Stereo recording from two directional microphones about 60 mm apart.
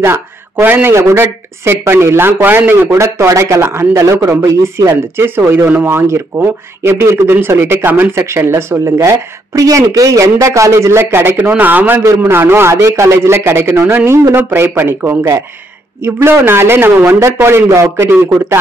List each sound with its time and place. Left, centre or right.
0.0 s speech: right
0.7 s speech: right
1.1 s speech: right
3.0 s a man's voice: right
3.9 s speech: right
4.7 s a man's voice: right
11.5 s speech: right
12.7 s a man's voice: right
17.6 s speech: right
17.9 s speech: right